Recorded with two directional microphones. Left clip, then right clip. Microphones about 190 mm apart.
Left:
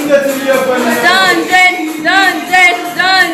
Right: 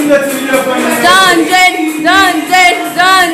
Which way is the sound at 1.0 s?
30° right (ahead or behind).